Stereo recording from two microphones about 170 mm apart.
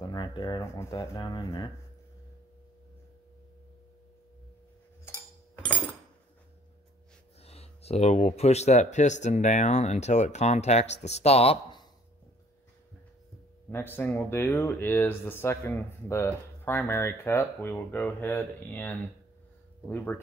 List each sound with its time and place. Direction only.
0.0 s speech: 25° left (ahead or behind)
5.0 s a sound: 10° left (ahead or behind)
7.4 s speech: 35° left (ahead or behind)
13.9 s speech: 10° left (ahead or behind)